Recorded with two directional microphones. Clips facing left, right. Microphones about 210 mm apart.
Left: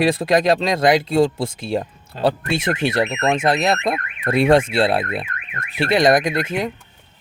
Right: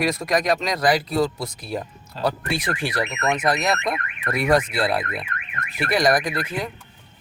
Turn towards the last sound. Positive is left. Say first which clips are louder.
# left 5 dB
turn(degrees=25)  # may be behind; listen again after turning